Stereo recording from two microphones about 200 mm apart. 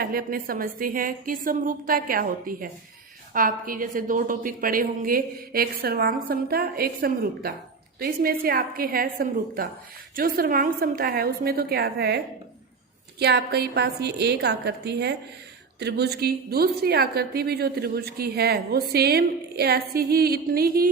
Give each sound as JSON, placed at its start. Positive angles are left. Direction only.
{"t": 0.0, "sound": "a woman's voice", "side_deg": -50}